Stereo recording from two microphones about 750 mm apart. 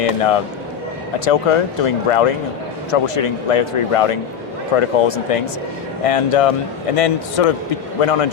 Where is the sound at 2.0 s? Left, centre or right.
Left.